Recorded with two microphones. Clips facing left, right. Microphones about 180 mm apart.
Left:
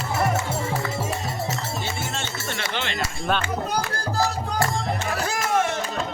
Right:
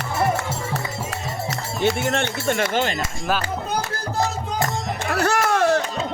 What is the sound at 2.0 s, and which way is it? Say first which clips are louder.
Speech: right 9 dB; 60° right (ahead or behind).